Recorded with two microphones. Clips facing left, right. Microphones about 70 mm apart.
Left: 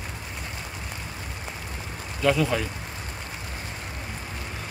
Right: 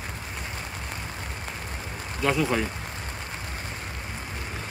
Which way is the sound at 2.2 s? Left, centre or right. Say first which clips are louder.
Left 2 dB; centre.